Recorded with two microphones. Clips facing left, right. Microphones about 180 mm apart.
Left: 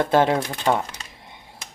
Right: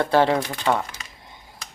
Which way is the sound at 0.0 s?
20° left (ahead or behind).